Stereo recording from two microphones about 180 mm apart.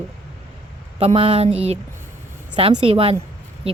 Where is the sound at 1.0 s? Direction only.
30° right (ahead or behind).